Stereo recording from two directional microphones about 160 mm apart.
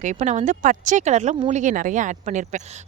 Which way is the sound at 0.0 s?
50° right (ahead or behind).